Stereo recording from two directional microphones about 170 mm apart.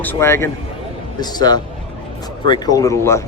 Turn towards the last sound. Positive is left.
turn(degrees=15)  # may be behind; listen again after turning